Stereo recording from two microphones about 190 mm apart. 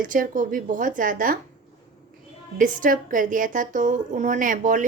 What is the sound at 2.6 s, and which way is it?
A woman's voice, 45° right (ahead or behind).